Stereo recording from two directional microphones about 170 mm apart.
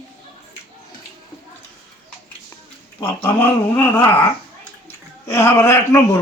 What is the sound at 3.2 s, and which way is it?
Speech, 10° left (ahead or behind).